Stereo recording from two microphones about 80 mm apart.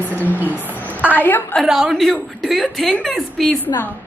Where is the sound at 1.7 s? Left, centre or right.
Centre.